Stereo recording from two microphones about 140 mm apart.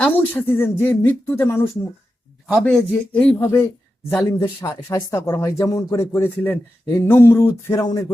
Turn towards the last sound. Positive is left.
turn(degrees=15)  # may be behind; listen again after turning